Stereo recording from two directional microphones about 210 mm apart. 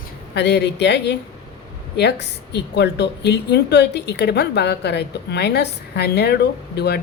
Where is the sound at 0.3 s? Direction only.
55° left (ahead or behind).